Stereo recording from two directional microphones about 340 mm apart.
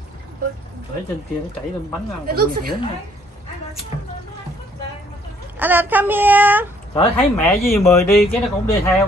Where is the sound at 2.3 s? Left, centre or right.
Right.